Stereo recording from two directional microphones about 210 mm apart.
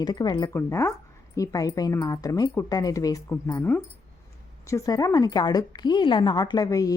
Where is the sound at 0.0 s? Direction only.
20° left (ahead or behind).